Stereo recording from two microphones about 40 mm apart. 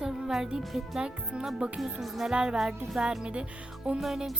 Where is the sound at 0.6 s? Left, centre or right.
Centre.